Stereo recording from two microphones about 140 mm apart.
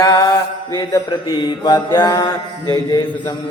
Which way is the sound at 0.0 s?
25° left (ahead or behind).